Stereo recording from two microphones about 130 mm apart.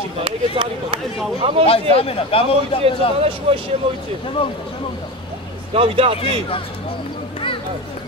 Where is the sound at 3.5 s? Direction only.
45° right (ahead or behind).